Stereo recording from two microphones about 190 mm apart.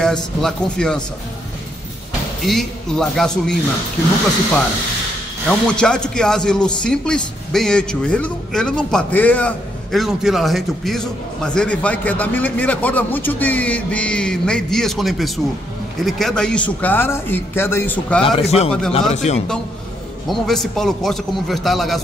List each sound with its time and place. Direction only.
0.0 s a man's voice: centre (ahead or behind)
2.4 s a man's voice: centre (ahead or behind)
5.5 s a man's voice: 5° left (ahead or behind)
18.2 s speech: 30° left (ahead or behind)
20.2 s a man's voice: centre (ahead or behind)